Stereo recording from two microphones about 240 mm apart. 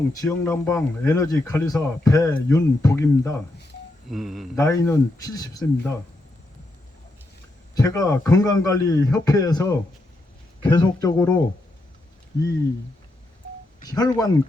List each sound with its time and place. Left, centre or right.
0.2 s speech: centre
4.1 s speech: centre
4.5 s speech: centre
7.8 s speech: centre
13.8 s speech: centre